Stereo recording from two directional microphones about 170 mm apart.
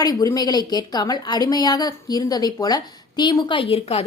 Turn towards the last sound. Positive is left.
turn(degrees=35)  # may be behind; listen again after turning